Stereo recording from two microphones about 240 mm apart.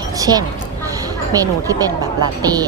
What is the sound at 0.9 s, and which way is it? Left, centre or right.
Speech, centre.